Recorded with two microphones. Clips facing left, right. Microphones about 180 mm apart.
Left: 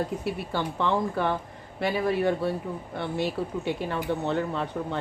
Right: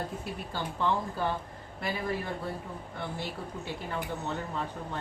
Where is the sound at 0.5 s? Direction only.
75° left (ahead or behind).